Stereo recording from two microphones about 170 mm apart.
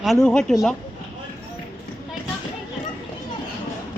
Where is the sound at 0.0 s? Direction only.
Centre (ahead or behind).